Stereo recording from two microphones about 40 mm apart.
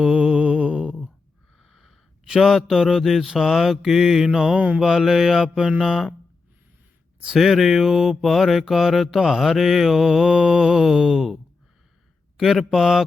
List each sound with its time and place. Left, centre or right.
0.0 s mantra: right
1.5 s a sound: centre
2.2 s mantra: centre
7.3 s mantra: centre
12.4 s a man's voice: centre